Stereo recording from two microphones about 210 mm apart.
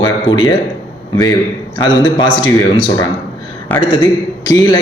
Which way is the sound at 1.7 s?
20° left (ahead or behind).